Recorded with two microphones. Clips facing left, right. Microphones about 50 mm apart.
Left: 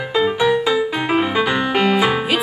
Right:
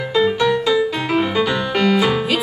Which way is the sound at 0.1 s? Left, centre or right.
Centre.